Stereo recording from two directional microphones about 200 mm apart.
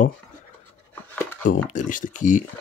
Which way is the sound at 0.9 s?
10° left (ahead or behind).